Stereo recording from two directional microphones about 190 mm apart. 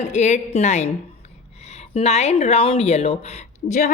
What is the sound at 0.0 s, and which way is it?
Speech, 35° left (ahead or behind).